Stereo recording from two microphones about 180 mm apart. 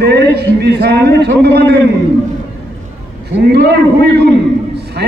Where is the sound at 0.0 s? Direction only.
65° right (ahead or behind).